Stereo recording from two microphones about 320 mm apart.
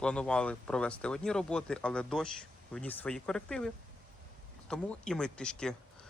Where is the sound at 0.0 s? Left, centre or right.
Centre.